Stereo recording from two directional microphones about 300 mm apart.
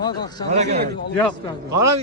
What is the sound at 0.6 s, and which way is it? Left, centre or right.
Speech, right.